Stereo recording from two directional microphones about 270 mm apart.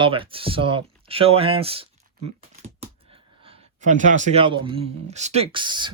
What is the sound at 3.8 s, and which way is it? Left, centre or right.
Speech, right.